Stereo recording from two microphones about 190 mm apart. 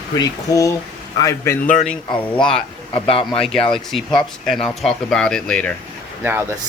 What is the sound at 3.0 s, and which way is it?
Speech, 30° left (ahead or behind).